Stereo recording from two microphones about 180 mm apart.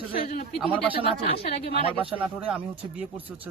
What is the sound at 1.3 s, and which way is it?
Speech, 35° left (ahead or behind).